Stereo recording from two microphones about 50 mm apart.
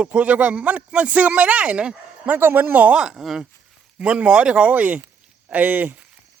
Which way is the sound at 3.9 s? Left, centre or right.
Right.